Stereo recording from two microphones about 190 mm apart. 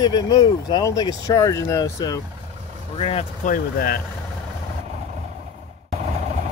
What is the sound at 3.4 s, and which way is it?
Speech, 50° left (ahead or behind).